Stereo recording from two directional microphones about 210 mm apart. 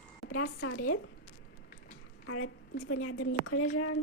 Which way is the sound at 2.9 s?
90° left.